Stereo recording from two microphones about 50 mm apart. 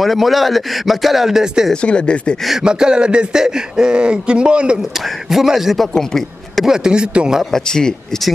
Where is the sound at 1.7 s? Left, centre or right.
Centre.